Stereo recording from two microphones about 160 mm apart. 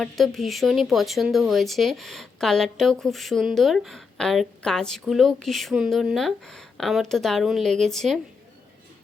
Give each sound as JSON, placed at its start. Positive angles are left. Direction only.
{"t": 0.0, "sound": "speech", "side_deg": 0}